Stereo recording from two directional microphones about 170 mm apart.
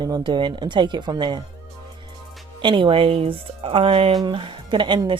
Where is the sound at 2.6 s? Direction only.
30° right (ahead or behind).